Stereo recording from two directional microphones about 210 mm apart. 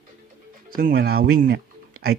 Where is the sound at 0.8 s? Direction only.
45° right (ahead or behind).